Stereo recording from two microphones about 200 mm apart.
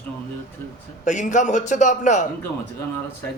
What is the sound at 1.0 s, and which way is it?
Speech, 40° left (ahead or behind).